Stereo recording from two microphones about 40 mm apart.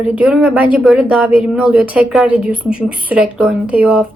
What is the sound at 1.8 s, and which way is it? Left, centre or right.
Speech, right.